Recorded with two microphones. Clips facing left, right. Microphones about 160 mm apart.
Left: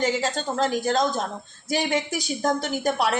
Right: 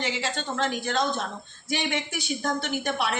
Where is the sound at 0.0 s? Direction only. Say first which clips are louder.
Left 6 dB; 45° left (ahead or behind).